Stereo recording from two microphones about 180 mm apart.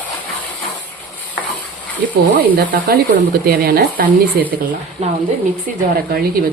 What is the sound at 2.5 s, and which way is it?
A woman's voice, 55° right (ahead or behind).